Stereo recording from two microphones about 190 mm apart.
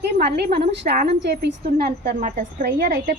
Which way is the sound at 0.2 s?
55° right (ahead or behind).